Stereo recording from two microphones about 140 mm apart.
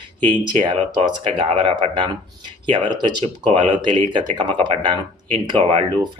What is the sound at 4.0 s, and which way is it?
Speech, 35° right (ahead or behind).